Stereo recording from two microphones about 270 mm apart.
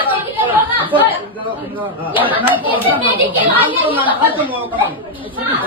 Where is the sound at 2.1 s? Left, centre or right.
Centre.